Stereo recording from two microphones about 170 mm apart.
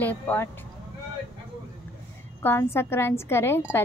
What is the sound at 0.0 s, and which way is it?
Speech, 10° left (ahead or behind).